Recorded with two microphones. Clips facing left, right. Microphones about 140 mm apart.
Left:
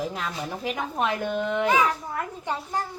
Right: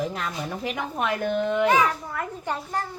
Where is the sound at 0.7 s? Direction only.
30° left (ahead or behind).